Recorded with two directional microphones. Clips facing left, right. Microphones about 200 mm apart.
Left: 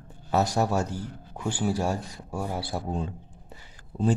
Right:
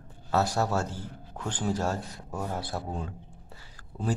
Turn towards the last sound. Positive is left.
turn(degrees=20)  # may be behind; listen again after turning